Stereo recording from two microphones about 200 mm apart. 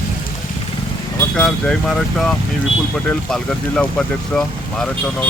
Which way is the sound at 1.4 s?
5° left (ahead or behind).